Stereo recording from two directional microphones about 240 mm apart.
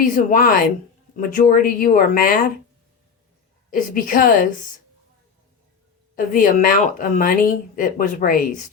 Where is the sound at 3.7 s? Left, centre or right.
Left.